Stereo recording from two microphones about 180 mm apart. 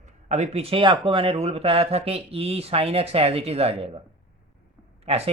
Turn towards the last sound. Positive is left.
turn(degrees=-35)  # may be behind; listen again after turning